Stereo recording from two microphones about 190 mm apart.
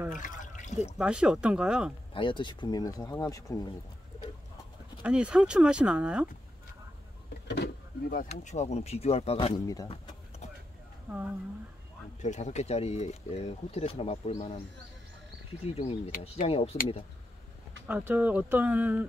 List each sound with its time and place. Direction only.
0.1 s water: 45° left (ahead or behind)
0.9 s speech: 5° right (ahead or behind)
2.1 s speech: 25° left (ahead or behind)
5.0 s speech: 5° right (ahead or behind)
7.4 s a sound: 60° left (ahead or behind)
8.3 s speech: 35° left (ahead or behind)
9.7 s speech: 20° left (ahead or behind)
12.2 s speech: 35° left (ahead or behind)
15.6 s speech: 30° left (ahead or behind)
17.8 s speech: 10° right (ahead or behind)